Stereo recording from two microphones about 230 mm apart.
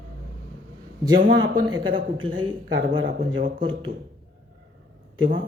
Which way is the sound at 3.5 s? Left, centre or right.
Right.